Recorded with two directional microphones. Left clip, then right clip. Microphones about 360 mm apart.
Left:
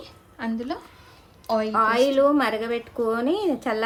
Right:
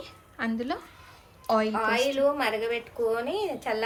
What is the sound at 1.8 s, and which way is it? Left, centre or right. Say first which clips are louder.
A woman's voice: left 6 dB; left.